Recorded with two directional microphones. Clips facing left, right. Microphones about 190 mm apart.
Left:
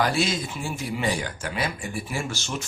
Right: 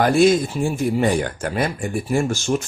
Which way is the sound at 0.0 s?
50° right (ahead or behind).